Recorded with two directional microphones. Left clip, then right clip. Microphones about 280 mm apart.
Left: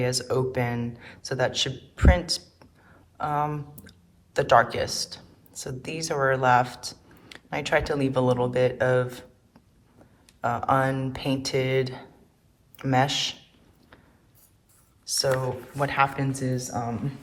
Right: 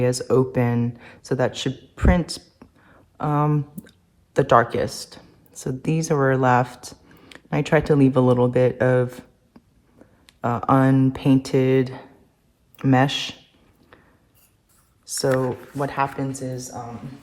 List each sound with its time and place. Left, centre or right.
0.0 s speech: right
10.4 s speech: right
15.8 s speech: centre